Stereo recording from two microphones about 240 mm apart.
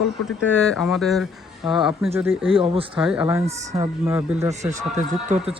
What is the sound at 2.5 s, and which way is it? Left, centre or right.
Speech, right.